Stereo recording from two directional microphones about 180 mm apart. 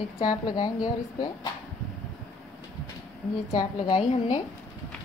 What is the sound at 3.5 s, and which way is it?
Speech, 35° left (ahead or behind).